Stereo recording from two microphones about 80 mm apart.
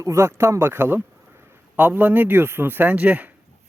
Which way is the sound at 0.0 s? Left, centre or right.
Right.